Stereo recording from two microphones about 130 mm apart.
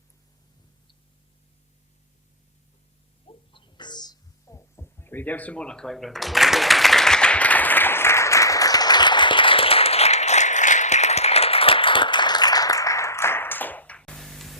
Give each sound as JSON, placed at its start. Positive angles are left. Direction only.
{"t": 3.5, "sound": "hum", "side_deg": 40}